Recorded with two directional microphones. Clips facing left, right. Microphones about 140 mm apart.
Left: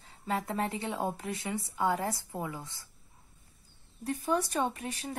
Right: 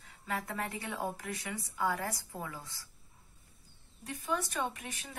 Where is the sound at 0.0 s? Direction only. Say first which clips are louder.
Left 5 dB; 30° left (ahead or behind).